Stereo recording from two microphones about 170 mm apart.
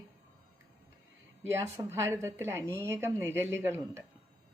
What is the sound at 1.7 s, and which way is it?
A woman's voice, 15° right (ahead or behind).